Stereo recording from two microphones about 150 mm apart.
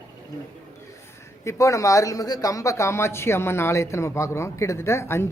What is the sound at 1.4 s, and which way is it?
Speech, 20° left (ahead or behind).